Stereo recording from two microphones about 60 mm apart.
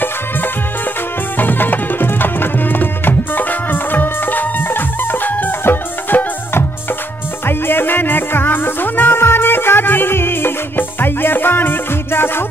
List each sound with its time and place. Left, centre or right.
1.4 s music: left